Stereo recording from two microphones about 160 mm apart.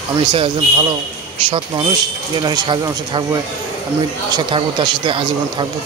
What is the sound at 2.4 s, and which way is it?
Speech, 25° right (ahead or behind).